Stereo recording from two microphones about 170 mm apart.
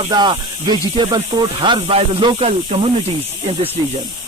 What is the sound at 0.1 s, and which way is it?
Speech, 25° right (ahead or behind).